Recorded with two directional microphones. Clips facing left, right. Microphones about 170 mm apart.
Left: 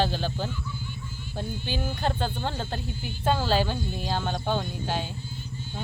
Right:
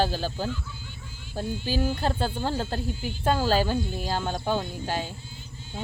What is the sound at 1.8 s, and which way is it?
Speech, 5° right (ahead or behind).